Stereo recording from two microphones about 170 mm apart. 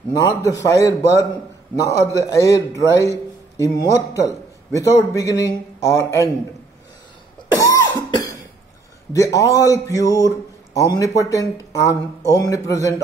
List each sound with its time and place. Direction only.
0.1 s a man's voice: 20° left (ahead or behind)
7.5 s cough: 20° left (ahead or behind)
9.1 s a man's voice: 20° left (ahead or behind)